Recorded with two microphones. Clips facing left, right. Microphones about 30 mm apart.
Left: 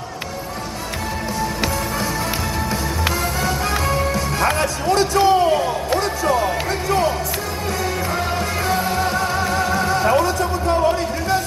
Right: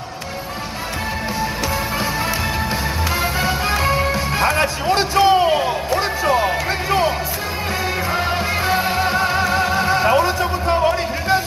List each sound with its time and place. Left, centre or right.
3.4 s music: right
4.6 s a man's voice: right
5.9 s music: right
8.6 s music: right